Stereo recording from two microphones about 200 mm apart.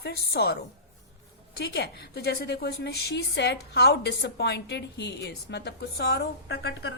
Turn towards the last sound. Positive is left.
turn(degrees=55)  # may be behind; listen again after turning